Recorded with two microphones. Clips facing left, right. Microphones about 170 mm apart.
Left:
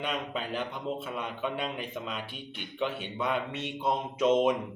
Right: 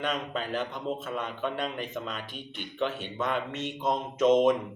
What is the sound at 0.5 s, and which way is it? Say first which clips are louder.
A man's voice: right 2 dB; 10° left (ahead or behind).